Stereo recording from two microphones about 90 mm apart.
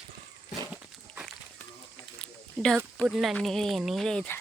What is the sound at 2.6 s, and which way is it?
Speech, 5° right (ahead or behind).